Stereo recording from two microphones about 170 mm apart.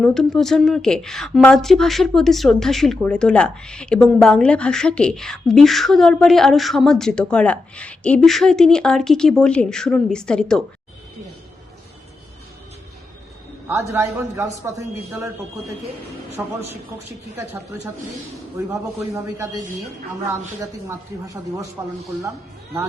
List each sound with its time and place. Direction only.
0.0 s a woman's voice: 5° left (ahead or behind)
13.7 s speech: 15° right (ahead or behind)
16.4 s speech: 10° right (ahead or behind)
19.1 s a man's voice: 20° right (ahead or behind)